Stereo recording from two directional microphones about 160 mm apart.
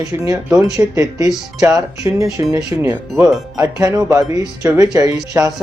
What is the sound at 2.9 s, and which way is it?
Speech, 5° right (ahead or behind).